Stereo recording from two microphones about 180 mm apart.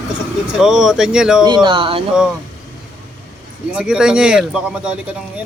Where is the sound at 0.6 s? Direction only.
Centre (ahead or behind).